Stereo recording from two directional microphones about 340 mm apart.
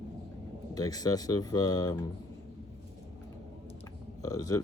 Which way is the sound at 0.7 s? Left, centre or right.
Centre.